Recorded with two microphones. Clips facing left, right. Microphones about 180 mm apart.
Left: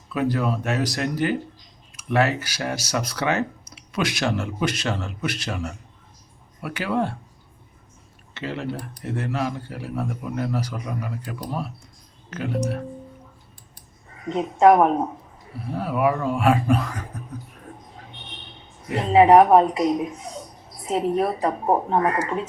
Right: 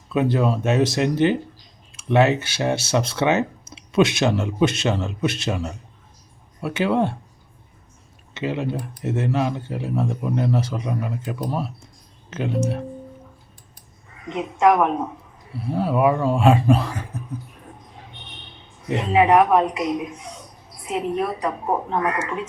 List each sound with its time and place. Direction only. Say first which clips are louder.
0.1 s speech: right 3 dB; 25° right (ahead or behind)
8.3 s speech: right 4 dB; 20° right (ahead or behind)
14.3 s speech: left 2 dB; 40° left (ahead or behind)
15.6 s speech: right 3 dB; 25° right (ahead or behind)
18.9 s speech: left 3 dB; 35° left (ahead or behind)